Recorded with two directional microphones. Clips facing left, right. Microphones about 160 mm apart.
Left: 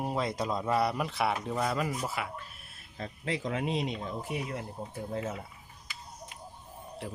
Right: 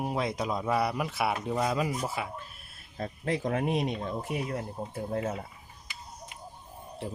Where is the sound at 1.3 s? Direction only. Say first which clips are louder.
Right 2 dB; 15° right (ahead or behind).